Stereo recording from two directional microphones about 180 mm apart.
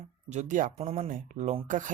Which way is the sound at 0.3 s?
40° right (ahead or behind).